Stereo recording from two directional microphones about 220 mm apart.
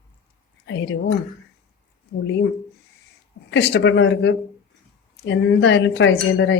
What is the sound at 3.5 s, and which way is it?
A woman's voice, 50° left (ahead or behind).